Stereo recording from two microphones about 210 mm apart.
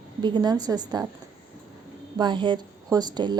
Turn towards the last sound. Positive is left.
turn(degrees=-20)  # may be behind; listen again after turning